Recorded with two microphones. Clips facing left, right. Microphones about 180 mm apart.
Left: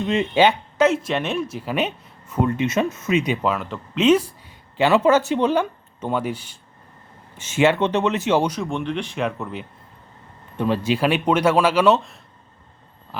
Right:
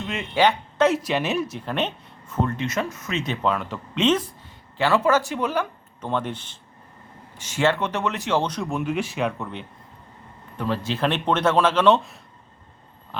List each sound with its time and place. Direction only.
0.0 s speech: 25° left (ahead or behind)
0.8 s speech: centre (ahead or behind); by 3.3 s 15° left (ahead or behind)
3.4 s speech: centre (ahead or behind); by 6.1 s 25° left (ahead or behind)
6.1 s speech: 10° left (ahead or behind)
10.6 s speech: 15° left (ahead or behind); by 12.2 s centre (ahead or behind)